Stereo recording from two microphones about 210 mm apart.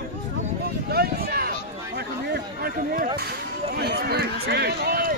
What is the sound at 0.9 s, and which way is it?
Speech, 45° right (ahead or behind).